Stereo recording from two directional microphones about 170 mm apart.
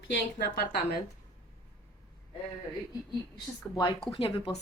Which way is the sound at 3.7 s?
25° left (ahead or behind).